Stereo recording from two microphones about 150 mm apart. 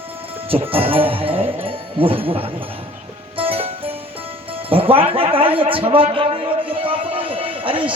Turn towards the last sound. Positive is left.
turn(degrees=-35)  # may be behind; listen again after turning